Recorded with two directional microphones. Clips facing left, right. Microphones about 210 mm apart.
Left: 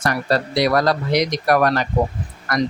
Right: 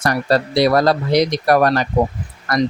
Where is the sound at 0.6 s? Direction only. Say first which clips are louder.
Right 3 dB; 30° right (ahead or behind).